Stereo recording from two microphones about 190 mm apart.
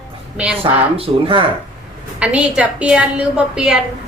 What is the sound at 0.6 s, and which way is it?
Speech, 30° right (ahead or behind).